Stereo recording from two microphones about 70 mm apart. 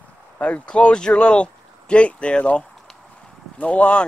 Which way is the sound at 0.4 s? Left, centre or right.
Centre.